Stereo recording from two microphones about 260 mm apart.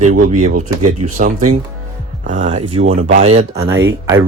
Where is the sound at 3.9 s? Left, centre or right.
Centre.